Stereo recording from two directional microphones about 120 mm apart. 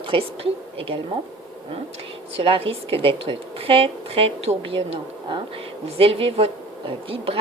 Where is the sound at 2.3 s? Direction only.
50° right (ahead or behind).